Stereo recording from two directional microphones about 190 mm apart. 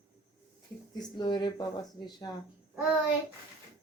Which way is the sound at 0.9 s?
20° left (ahead or behind).